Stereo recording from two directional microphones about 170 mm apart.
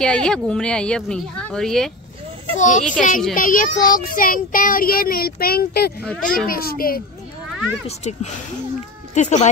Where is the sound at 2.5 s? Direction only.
45° left (ahead or behind).